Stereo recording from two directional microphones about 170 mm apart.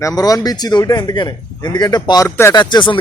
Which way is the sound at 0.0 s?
20° left (ahead or behind).